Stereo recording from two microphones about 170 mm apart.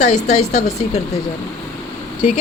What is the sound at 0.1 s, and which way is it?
Speech, 40° left (ahead or behind).